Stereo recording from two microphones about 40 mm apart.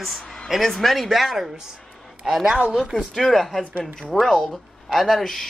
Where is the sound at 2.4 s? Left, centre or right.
Centre.